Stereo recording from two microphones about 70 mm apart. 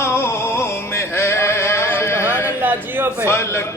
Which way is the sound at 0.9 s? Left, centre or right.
Left.